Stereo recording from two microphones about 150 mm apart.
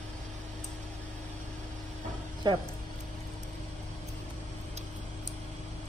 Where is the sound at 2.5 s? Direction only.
30° right (ahead or behind).